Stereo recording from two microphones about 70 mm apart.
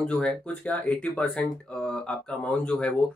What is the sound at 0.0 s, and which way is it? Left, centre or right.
Speech, centre.